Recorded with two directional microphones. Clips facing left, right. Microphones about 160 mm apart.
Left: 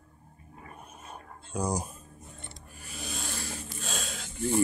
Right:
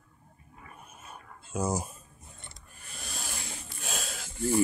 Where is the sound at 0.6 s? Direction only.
40° left (ahead or behind).